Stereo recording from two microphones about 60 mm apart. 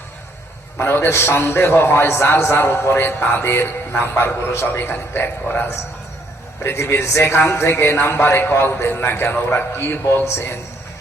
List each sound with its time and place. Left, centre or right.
0.8 s a man's voice: left
6.6 s a man's voice: left